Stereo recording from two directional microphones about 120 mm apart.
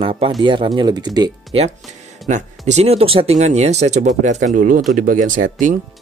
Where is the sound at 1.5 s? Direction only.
55° right (ahead or behind).